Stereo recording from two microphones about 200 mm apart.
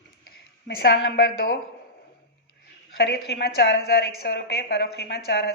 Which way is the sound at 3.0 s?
55° left (ahead or behind).